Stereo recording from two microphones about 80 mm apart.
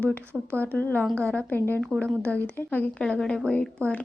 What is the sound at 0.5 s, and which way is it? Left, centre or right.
A woman's voice, centre.